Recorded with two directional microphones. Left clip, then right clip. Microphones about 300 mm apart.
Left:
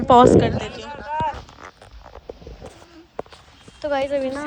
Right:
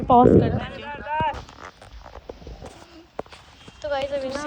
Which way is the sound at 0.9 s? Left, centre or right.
Right.